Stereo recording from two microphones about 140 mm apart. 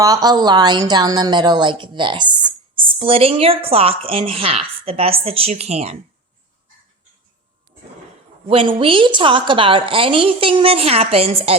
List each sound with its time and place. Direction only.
0.0 s a woman's voice: 25° right (ahead or behind); by 6.0 s 50° right (ahead or behind)
8.4 s a woman's voice: 40° right (ahead or behind)